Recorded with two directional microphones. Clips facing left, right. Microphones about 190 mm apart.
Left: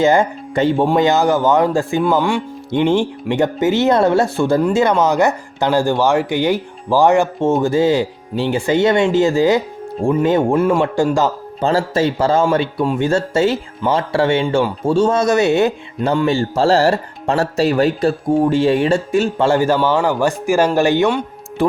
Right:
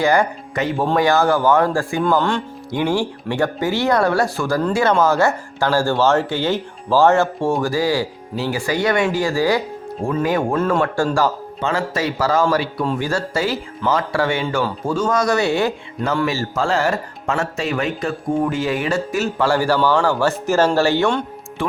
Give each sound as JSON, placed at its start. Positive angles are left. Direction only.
{"t": 0.0, "sound": "speech", "side_deg": 20}
{"t": 2.1, "sound": "speech", "side_deg": 10}
{"t": 2.7, "sound": "speech", "side_deg": 20}
{"t": 11.6, "sound": "speech", "side_deg": 35}
{"t": 21.6, "sound": "speech", "side_deg": 40}